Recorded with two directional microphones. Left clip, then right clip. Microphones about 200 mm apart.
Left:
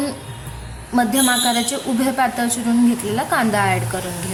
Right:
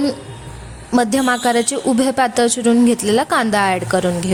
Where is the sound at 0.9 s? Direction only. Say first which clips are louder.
Right 2 dB; 45° right (ahead or behind).